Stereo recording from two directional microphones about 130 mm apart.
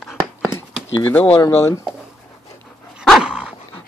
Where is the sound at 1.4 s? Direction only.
20° left (ahead or behind).